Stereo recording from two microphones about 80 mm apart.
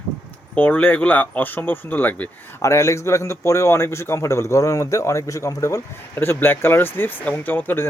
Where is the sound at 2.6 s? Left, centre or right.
Left.